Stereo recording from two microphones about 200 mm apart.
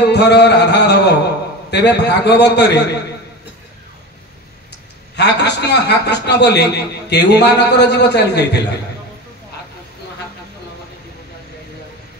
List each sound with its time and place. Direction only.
0.0 s a man's voice: 60° left (ahead or behind)
5.1 s a man's voice: 55° left (ahead or behind)